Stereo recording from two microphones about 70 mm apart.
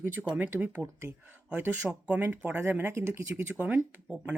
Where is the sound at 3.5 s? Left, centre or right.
Right.